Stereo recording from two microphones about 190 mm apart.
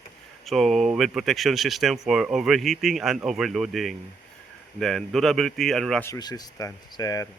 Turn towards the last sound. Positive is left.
turn(degrees=20)  # may be behind; listen again after turning